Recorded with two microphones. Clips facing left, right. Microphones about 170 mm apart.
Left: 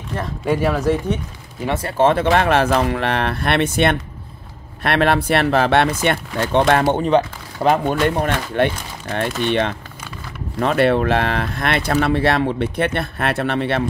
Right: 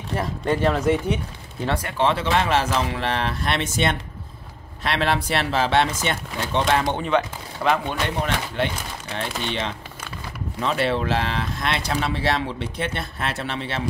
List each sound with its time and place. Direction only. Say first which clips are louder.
0.5 s speech: left 2 dB; 10° left (ahead or behind)
1.7 s speech: left 3 dB; 30° left (ahead or behind)
2.0 s speech: left 7 dB; 50° left (ahead or behind)
7.0 s speech: left 6 dB; 35° left (ahead or behind); by 13.8 s 55° left (ahead or behind)